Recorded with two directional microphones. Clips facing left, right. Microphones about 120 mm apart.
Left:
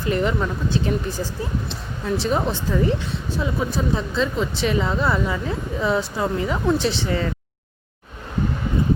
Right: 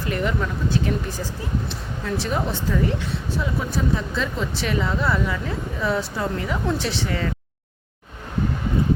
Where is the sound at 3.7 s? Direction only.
20° left (ahead or behind).